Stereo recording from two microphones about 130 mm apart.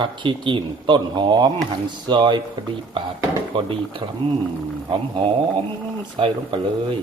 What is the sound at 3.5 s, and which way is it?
Speech, 40° right (ahead or behind).